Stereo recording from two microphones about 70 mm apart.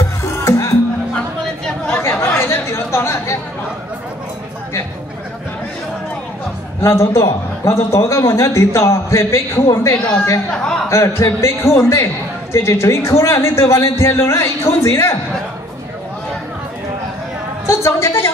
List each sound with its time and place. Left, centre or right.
0.2 s music: left
2.0 s chatter: left
6.8 s a man's voice: left
10.5 s speech: centre
10.9 s a man's voice: left
17.6 s a woman's voice: left